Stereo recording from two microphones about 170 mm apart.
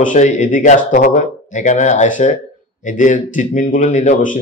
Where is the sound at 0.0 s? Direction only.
50° left (ahead or behind).